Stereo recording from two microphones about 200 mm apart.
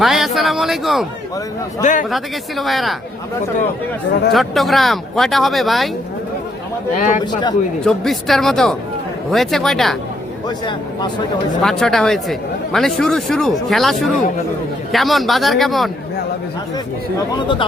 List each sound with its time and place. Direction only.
0.0 s speech: centre (ahead or behind)
1.8 s speech: 40° left (ahead or behind)
2.0 s speech: centre (ahead or behind)
4.3 s speech: centre (ahead or behind)
6.9 s speech: 40° left (ahead or behind)
7.9 s speech: centre (ahead or behind)
11.6 s speech: centre (ahead or behind)
17.3 s speech: 25° left (ahead or behind)